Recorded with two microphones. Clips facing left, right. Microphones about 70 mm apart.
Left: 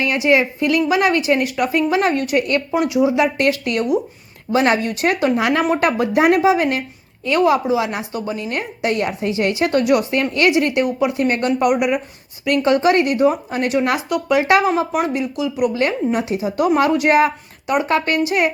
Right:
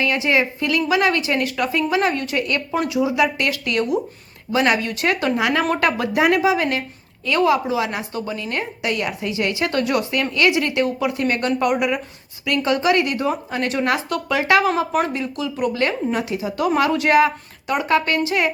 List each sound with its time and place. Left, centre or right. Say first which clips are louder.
0.3 s a woman's voice: left 7 dB; left
12.5 s a woman's voice: left 4 dB; left; by 15.7 s centre
15.7 s a woman's voice: left 3 dB; left